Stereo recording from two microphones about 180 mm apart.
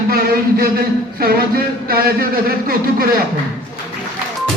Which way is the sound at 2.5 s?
55° right (ahead or behind).